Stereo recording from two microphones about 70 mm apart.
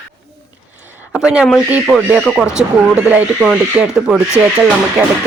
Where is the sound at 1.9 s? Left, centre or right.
Right.